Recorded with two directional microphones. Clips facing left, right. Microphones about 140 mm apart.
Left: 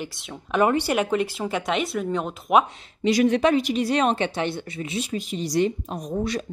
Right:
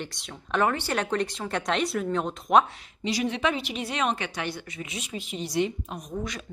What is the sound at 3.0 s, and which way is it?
Speech, 50° left (ahead or behind).